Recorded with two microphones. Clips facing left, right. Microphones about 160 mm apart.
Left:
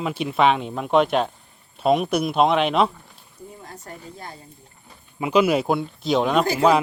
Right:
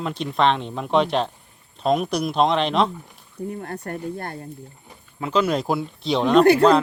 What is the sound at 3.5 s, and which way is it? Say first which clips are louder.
Speech: right 9 dB; 60° right (ahead or behind).